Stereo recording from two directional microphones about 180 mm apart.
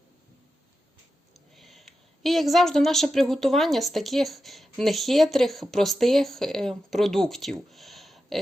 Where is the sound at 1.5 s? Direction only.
Centre (ahead or behind).